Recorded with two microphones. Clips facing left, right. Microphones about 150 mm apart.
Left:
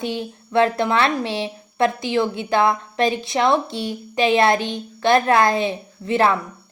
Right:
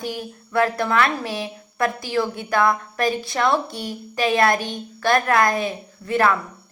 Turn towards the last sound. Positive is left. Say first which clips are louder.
# left 1 dB
turn(degrees=25)  # may be behind; listen again after turning